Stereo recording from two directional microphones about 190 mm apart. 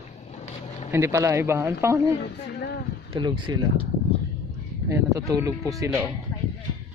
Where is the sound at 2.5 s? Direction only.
60° left (ahead or behind).